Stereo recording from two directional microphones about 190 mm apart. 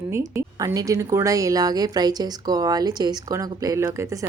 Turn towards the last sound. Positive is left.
turn(degrees=-15)  # may be behind; listen again after turning